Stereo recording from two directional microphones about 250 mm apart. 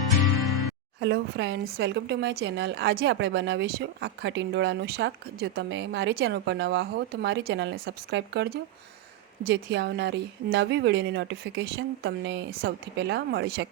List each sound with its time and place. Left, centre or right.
0.9 s a woman's voice: right